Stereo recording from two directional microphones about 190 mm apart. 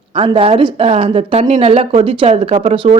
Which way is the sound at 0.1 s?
30° right (ahead or behind).